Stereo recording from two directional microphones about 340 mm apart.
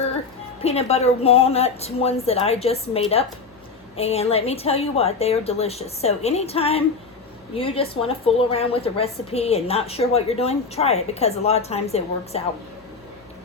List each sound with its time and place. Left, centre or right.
0.6 s a woman's voice: centre